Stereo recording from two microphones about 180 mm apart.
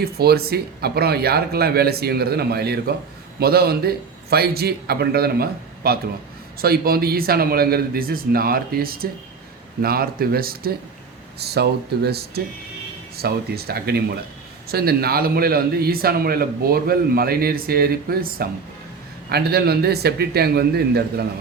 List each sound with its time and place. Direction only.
0.0 s a man's voice: 60° right (ahead or behind)